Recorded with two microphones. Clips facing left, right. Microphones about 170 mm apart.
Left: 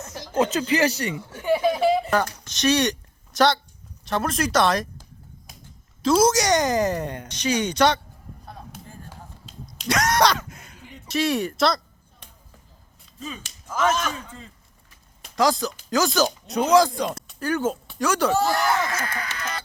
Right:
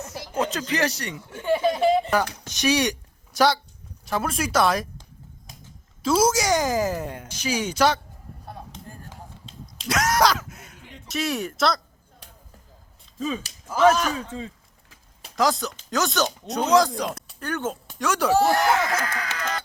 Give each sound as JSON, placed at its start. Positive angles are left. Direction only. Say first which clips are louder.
{"t": 0.0, "sound": "speech", "louder": "left 4 dB", "side_deg": 0}
{"t": 1.4, "sound": "a sound", "louder": "even", "side_deg": 10}
{"t": 2.1, "sound": "speech", "louder": "even", "side_deg": -10}
{"t": 6.0, "sound": "a woman's voice", "louder": "left 2 dB", "side_deg": -5}
{"t": 9.5, "sound": "a sound", "louder": "left 2 dB", "side_deg": 0}
{"t": 13.7, "sound": "speech", "louder": "right 5 dB", "side_deg": -35}
{"t": 14.3, "sound": "a sound", "louder": "right 9 dB", "side_deg": -90}
{"t": 15.4, "sound": "a woman's voice", "louder": "left 2 dB", "side_deg": 0}
{"t": 19.0, "sound": "speech", "louder": "right 2 dB", "side_deg": -45}